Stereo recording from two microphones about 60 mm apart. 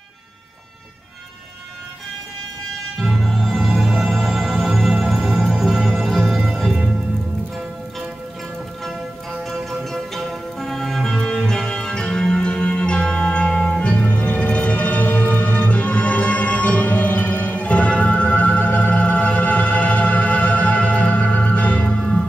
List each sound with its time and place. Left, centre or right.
3.0 s music: centre
9.4 s music: centre